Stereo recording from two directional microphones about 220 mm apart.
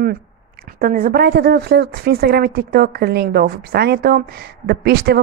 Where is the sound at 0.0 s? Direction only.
45° right (ahead or behind).